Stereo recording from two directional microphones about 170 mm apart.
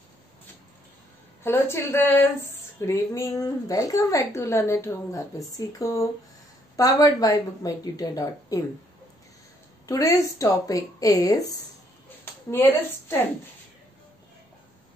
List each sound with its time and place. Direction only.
1.4 s a woman's voice: 15° left (ahead or behind)
9.8 s a woman's voice: 20° left (ahead or behind)